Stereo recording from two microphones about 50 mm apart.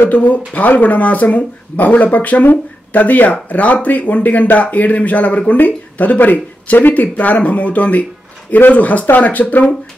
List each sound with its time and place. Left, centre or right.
0.1 s speech: left